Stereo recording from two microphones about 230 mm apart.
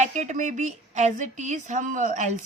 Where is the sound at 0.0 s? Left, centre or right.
Right.